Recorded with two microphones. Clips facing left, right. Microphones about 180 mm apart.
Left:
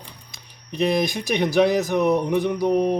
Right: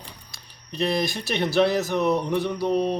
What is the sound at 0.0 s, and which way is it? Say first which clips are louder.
Speech: left 1 dB; 15° left (ahead or behind).